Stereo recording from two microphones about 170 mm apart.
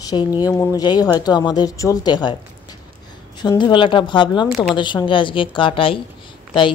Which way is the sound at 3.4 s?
25° left (ahead or behind).